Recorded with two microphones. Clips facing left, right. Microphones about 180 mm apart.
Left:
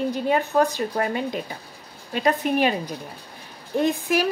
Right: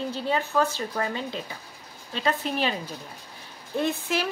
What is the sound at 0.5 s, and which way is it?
Speech, 30° left (ahead or behind).